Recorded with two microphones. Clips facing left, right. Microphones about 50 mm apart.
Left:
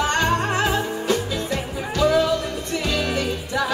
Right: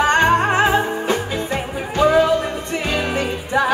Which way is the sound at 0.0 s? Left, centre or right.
Right.